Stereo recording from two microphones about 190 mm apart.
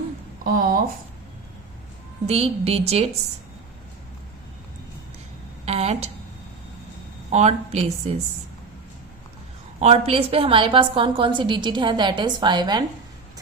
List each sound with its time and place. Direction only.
0.4 s speech: 45° right (ahead or behind)
2.2 s a woman's voice: 30° right (ahead or behind)
5.6 s a sound: 35° right (ahead or behind)
7.3 s a woman's voice: 35° right (ahead or behind)
9.8 s a woman's voice: 30° right (ahead or behind)